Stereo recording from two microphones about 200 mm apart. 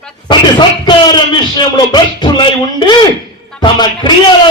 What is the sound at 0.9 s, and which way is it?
A man's voice, 20° left (ahead or behind).